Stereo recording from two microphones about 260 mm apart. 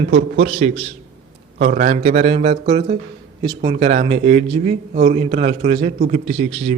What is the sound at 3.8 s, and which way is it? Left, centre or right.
A man's voice, right.